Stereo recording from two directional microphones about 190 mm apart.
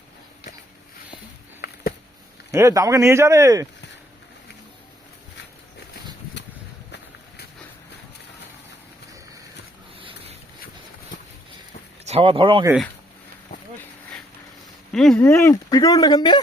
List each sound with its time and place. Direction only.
1.6 s a sound: 55° left (ahead or behind)
2.5 s speech: 15° right (ahead or behind)
10.0 s boat: 25° right (ahead or behind)
12.0 s speech: 30° right (ahead or behind)
14.9 s speech: centre (ahead or behind)
15.2 s speech: 15° left (ahead or behind)